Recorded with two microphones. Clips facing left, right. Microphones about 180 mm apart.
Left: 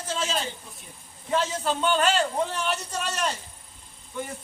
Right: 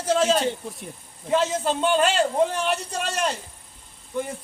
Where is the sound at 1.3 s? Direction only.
30° right (ahead or behind).